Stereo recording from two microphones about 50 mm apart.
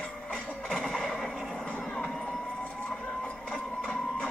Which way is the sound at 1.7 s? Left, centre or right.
Left.